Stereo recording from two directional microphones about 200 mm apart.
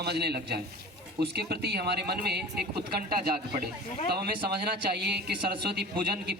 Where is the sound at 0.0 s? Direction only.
55° right (ahead or behind).